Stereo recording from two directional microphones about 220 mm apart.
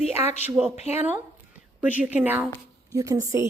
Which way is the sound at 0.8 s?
30° left (ahead or behind).